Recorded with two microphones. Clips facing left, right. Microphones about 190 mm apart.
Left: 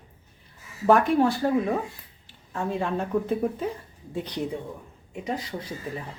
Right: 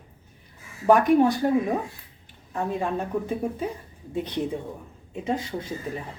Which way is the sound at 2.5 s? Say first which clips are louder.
Right 1 dB; 15° right (ahead or behind).